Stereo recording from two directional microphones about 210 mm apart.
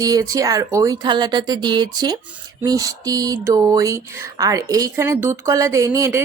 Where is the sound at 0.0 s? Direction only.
15° right (ahead or behind).